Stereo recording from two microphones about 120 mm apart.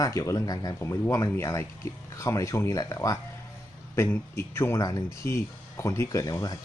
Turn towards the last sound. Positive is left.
turn(degrees=30)  # may be behind; listen again after turning